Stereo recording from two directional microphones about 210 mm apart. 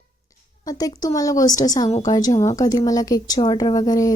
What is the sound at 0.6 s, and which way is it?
Speech, 20° left (ahead or behind).